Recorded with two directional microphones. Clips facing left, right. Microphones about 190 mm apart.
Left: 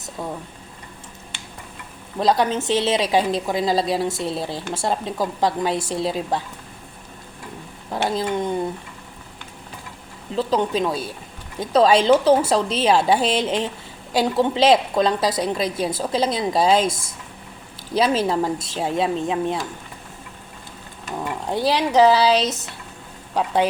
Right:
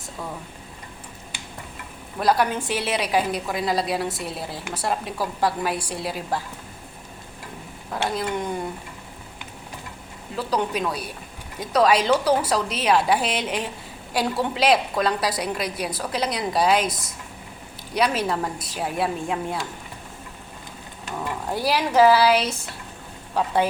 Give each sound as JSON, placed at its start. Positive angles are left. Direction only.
{"t": 2.1, "sound": "a woman's voice", "side_deg": 25}
{"t": 8.0, "sound": "a woman's voice", "side_deg": 20}
{"t": 10.3, "sound": "a woman's voice", "side_deg": 25}
{"t": 21.5, "sound": "a woman's voice", "side_deg": 20}